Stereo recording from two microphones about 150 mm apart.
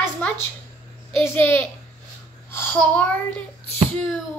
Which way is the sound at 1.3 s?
15° left (ahead or behind).